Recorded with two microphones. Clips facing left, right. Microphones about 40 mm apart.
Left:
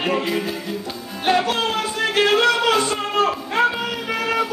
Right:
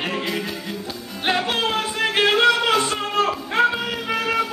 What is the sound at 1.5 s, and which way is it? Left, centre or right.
Music, centre.